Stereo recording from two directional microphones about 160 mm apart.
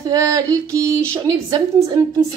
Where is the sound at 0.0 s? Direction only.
20° right (ahead or behind).